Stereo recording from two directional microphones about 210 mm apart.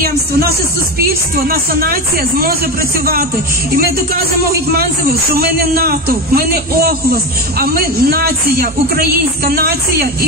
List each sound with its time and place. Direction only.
1.5 s speech: 45° right (ahead or behind)
4.5 s speech: 45° right (ahead or behind)